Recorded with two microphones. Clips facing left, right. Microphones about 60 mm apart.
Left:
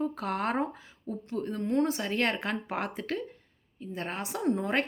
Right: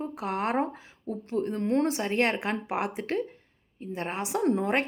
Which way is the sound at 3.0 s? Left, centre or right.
Right.